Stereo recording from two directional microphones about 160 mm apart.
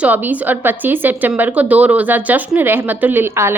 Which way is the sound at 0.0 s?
10° right (ahead or behind).